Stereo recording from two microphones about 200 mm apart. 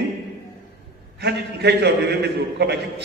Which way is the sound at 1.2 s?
55° right (ahead or behind).